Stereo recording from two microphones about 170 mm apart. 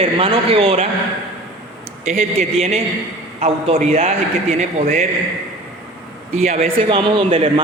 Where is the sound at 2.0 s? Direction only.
40° right (ahead or behind).